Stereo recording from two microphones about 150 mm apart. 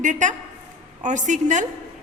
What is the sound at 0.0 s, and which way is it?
A woman's voice, 55° right (ahead or behind).